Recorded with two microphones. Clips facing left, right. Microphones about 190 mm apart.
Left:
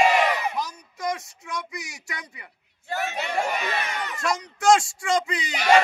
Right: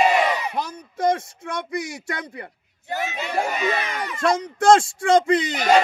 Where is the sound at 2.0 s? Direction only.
55° right (ahead or behind).